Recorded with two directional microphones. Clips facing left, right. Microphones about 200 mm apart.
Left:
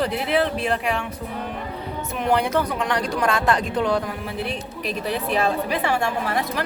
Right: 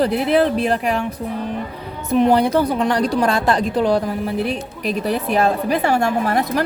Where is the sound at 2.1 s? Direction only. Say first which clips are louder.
Right 7 dB; 35° right (ahead or behind).